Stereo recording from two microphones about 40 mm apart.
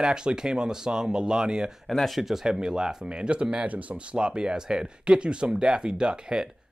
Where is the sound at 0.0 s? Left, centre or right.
Right.